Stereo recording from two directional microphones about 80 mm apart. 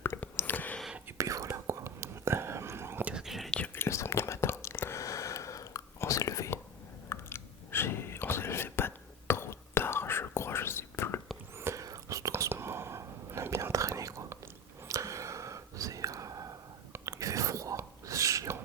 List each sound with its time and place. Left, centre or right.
0.3 s whispering: left
1.2 s whispering: right
3.0 s whispering: centre
3.2 s whispering: centre
3.8 s whispering: left
11.5 s whispering: right
12.3 s whispering: right